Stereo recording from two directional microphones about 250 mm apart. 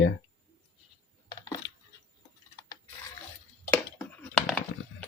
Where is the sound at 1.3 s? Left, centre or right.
Centre.